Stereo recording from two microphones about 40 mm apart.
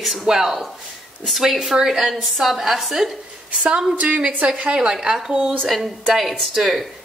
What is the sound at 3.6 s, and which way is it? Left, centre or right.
Speech, right.